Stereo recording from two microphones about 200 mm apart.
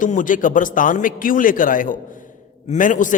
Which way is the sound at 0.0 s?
40° left (ahead or behind).